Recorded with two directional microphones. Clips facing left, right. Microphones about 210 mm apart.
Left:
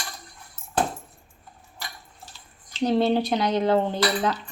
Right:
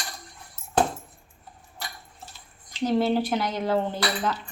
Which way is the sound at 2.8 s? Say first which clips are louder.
Left 2 dB; 15° left (ahead or behind).